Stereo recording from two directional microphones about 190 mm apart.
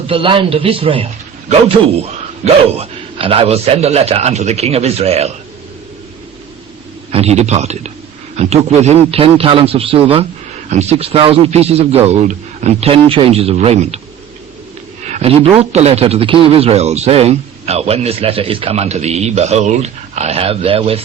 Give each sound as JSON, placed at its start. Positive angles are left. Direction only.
{"t": 0.1, "sound": "speech", "side_deg": -25}
{"t": 7.1, "sound": "speech", "side_deg": -35}
{"t": 15.0, "sound": "a sound", "side_deg": -35}
{"t": 15.5, "sound": "speech", "side_deg": -35}